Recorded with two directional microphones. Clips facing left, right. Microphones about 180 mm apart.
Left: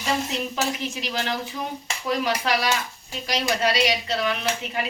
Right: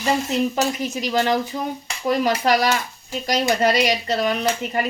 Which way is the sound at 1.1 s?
45° right (ahead or behind).